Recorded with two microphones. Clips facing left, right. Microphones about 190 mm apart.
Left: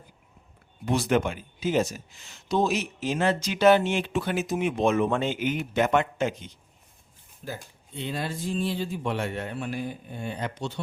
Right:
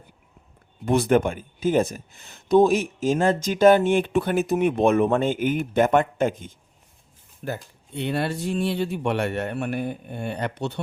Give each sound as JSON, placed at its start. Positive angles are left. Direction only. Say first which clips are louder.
{"t": 0.9, "sound": "speech", "louder": "right 5 dB", "side_deg": -55}
{"t": 7.4, "sound": "speech", "louder": "right 6 dB", "side_deg": -65}